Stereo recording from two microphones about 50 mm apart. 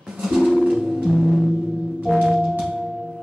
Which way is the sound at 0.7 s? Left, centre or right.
Centre.